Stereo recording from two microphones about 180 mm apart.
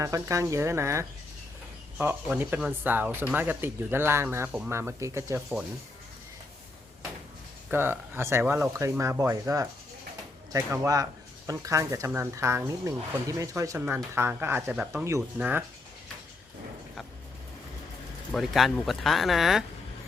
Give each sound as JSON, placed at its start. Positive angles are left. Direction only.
{"t": 0.0, "sound": "speech", "side_deg": -15}
{"t": 7.7, "sound": "speech", "side_deg": -10}
{"t": 18.3, "sound": "speech", "side_deg": 0}